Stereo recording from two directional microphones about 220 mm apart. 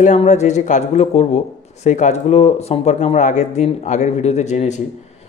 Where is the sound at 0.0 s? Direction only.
30° left (ahead or behind).